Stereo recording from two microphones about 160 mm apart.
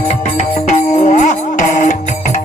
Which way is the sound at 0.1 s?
45° left (ahead or behind).